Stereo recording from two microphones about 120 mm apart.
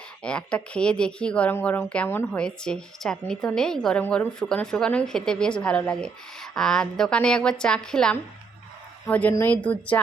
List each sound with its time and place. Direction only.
0.2 s a woman's voice: 10° left (ahead or behind)